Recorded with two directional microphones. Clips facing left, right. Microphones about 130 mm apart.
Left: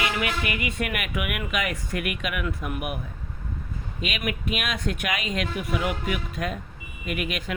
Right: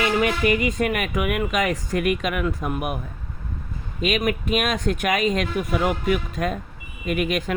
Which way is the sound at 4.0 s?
40° right (ahead or behind).